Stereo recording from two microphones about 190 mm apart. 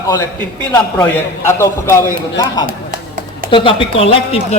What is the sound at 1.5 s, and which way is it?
A man's voice, 15° left (ahead or behind).